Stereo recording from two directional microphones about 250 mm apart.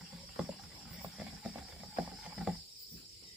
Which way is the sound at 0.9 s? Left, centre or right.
Centre.